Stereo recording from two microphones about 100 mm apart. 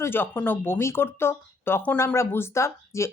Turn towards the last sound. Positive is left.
turn(degrees=30)  # may be behind; listen again after turning